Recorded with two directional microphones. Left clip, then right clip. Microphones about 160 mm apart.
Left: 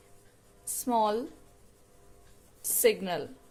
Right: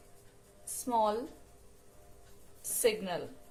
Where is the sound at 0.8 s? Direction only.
55° left (ahead or behind).